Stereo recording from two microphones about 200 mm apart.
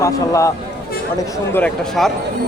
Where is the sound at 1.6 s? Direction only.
5° left (ahead or behind).